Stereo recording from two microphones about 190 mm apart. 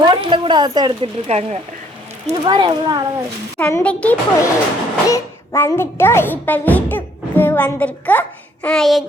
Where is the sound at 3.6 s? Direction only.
10° left (ahead or behind).